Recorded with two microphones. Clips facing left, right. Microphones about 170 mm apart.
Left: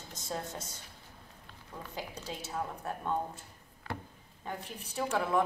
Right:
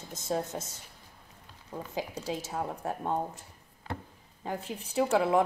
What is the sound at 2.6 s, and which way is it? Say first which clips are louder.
Speech: right 4 dB; 35° right (ahead or behind).